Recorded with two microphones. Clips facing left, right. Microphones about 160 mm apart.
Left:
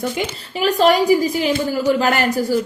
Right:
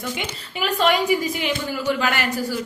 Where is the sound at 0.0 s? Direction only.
40° left (ahead or behind).